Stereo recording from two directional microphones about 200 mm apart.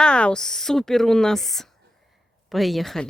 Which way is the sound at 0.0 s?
5° left (ahead or behind).